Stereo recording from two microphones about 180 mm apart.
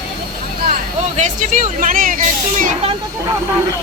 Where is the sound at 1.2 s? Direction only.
45° right (ahead or behind).